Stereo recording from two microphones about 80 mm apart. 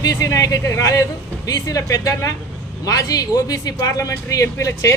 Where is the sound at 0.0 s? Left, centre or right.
Left.